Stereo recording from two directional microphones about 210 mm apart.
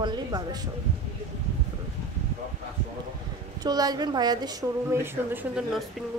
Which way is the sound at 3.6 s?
20° right (ahead or behind).